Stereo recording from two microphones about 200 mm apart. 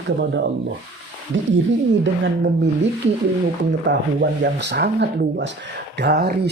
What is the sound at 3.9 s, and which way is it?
Speech, 65° right (ahead or behind).